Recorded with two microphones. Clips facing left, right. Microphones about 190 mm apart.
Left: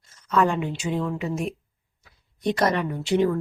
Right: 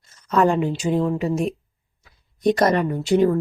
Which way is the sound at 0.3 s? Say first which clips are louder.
Right 4 dB; 40° right (ahead or behind).